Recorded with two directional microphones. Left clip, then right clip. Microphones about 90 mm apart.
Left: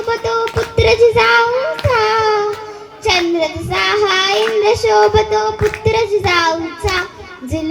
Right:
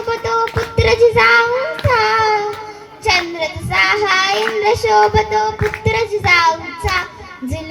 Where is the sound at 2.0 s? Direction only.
35° left (ahead or behind).